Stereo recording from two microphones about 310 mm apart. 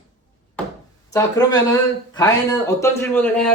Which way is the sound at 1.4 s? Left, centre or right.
Centre.